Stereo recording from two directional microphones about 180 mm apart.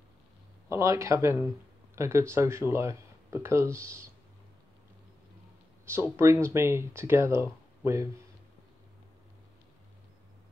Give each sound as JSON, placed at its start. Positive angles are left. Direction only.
{"t": 0.7, "sound": "speech", "side_deg": -15}
{"t": 5.9, "sound": "speech", "side_deg": -15}